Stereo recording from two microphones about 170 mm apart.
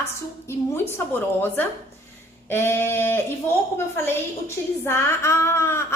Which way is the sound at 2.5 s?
15° left (ahead or behind).